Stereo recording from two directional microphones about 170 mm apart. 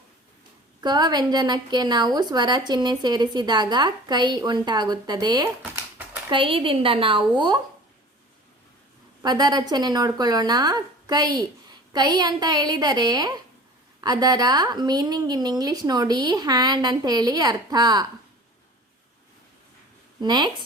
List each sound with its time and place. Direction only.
0.8 s a woman's voice: 25° right (ahead or behind)
9.2 s a woman's voice: 25° right (ahead or behind)
20.2 s a woman's voice: 25° right (ahead or behind)